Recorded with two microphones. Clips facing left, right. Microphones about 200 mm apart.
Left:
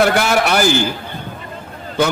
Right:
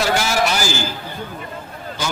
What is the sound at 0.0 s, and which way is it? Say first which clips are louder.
Speech: left 4 dB; 60° left (ahead or behind).